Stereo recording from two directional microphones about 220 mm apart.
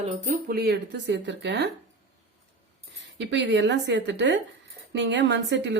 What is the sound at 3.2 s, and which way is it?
A woman's voice, 55° right (ahead or behind).